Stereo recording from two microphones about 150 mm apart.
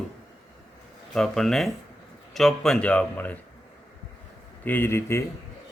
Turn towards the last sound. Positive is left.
turn(degrees=15)  # may be behind; listen again after turning